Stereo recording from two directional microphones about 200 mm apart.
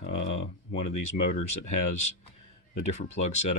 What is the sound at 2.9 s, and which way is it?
Speech, 35° left (ahead or behind).